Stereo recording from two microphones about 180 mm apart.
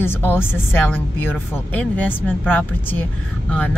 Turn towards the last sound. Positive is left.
turn(degrees=10)  # may be behind; listen again after turning